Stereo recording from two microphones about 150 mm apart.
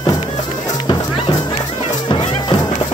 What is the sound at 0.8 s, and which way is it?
Music, 35° left (ahead or behind).